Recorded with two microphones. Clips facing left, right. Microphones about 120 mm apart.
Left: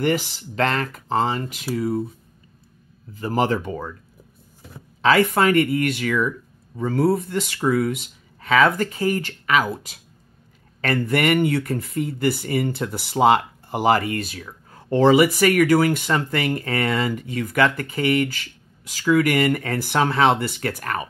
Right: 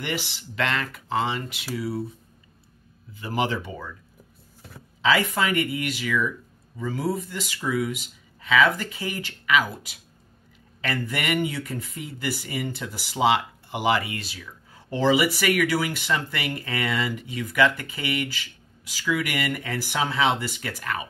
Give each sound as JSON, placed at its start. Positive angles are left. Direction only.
{"t": 0.0, "sound": "speech", "side_deg": 45}
{"t": 3.2, "sound": "speech", "side_deg": 40}
{"t": 5.0, "sound": "speech", "side_deg": 55}